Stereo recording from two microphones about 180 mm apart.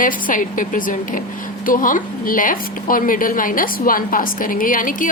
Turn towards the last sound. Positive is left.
turn(degrees=50)  # may be behind; listen again after turning